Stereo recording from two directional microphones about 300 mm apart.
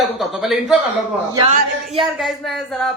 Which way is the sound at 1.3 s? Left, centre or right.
Centre.